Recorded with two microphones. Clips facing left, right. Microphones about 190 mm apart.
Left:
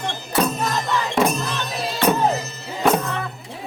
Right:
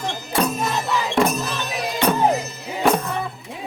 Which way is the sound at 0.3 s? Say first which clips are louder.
Even; 5° right (ahead or behind).